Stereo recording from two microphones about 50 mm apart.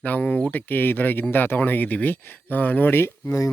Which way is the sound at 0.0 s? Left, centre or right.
Left.